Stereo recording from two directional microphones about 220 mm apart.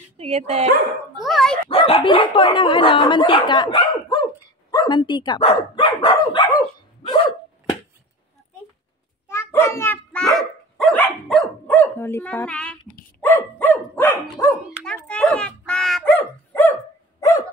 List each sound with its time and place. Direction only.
0.2 s speech: 30° right (ahead or behind)
1.2 s speech: centre (ahead or behind)
1.7 s speech: 25° left (ahead or behind)
7.0 s dog: 20° left (ahead or behind)
9.3 s dog: 10° left (ahead or behind)